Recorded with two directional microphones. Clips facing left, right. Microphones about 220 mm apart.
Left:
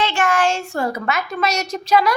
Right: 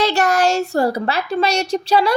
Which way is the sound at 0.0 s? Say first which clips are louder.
Right 3 dB; 40° right (ahead or behind).